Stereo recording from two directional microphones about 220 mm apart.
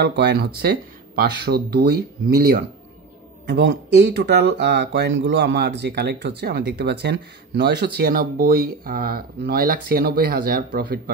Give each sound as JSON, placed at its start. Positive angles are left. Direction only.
{"t": 0.0, "sound": "speech", "side_deg": -50}